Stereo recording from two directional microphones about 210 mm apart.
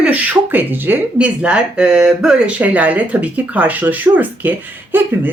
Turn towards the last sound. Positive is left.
turn(degrees=-10)  # may be behind; listen again after turning